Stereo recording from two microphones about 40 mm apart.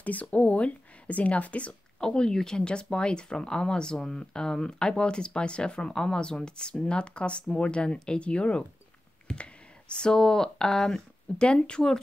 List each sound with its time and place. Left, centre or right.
0.0 s speech: left
2.0 s speech: centre